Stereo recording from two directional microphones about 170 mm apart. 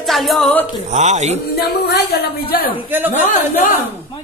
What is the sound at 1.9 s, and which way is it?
Speech, 60° left (ahead or behind).